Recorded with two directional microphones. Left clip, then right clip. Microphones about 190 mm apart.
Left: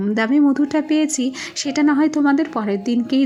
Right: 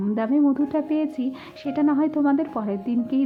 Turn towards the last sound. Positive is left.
turn(degrees=20)  # may be behind; listen again after turning